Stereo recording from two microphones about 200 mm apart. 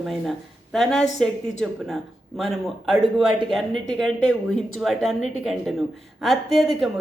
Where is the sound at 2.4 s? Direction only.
Centre (ahead or behind).